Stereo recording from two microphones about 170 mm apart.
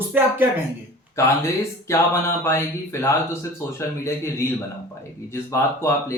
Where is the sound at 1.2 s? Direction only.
15° left (ahead or behind).